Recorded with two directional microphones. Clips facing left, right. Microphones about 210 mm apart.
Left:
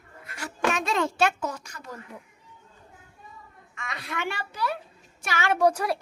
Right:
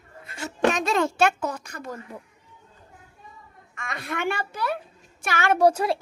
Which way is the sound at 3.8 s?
50° right (ahead or behind).